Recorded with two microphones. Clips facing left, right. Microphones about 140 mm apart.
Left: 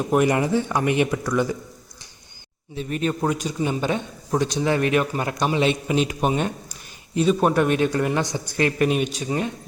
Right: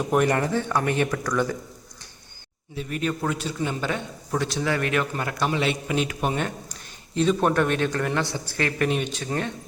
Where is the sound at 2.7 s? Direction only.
25° left (ahead or behind).